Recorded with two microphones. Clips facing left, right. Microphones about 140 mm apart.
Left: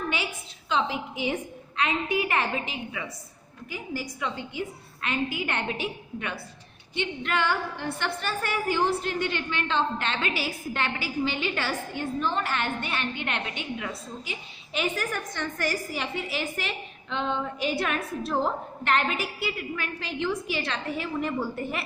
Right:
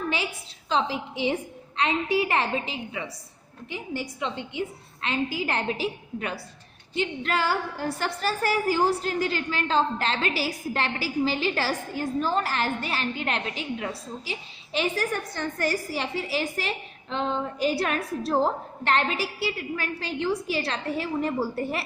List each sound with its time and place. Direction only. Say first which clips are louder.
0.7 s a woman's voice: right 1 dB; 35° right (ahead or behind)